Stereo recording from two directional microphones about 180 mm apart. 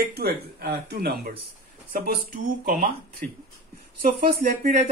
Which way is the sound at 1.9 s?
50° right (ahead or behind).